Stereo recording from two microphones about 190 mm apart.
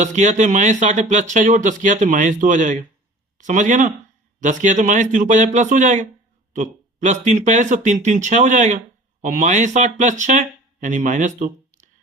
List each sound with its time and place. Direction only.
0.0 s speech: 40° right (ahead or behind)